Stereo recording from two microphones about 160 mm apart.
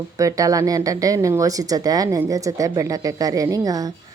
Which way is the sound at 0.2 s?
20° right (ahead or behind).